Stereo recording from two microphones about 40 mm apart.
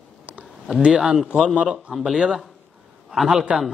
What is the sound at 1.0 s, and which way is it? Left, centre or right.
Speech, centre.